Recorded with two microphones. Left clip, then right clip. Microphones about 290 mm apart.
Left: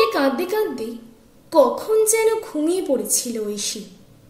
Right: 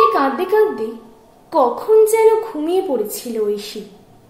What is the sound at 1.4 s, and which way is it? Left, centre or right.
A woman's voice, right.